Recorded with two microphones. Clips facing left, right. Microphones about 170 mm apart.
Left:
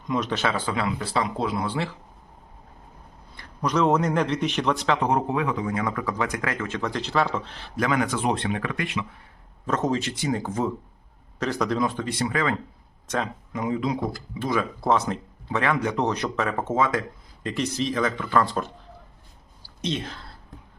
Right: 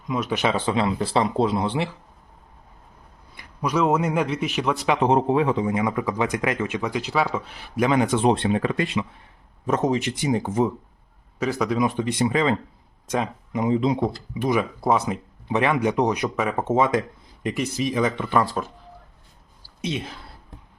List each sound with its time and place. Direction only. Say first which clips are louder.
0.1 s speech: right 2 dB; 5° right (ahead or behind)
3.3 s speech: right 1 dB; 5° right (ahead or behind)
4.9 s speech: right 5 dB; 25° right (ahead or behind)
7.9 s speech: right 5 dB; 25° right (ahead or behind)
9.6 s speech: right 3 dB; 15° right (ahead or behind)
11.3 s speech: right 2 dB; 5° right (ahead or behind)
18.4 s speech: even; 5° right (ahead or behind)
19.8 s speech: even; 10° right (ahead or behind)